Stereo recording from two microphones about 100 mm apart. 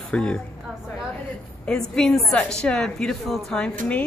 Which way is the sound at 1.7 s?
5° left (ahead or behind).